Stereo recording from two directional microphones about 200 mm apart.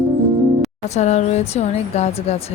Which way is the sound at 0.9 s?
35° left (ahead or behind).